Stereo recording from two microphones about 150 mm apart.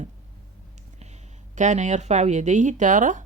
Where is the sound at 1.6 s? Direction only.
55° right (ahead or behind).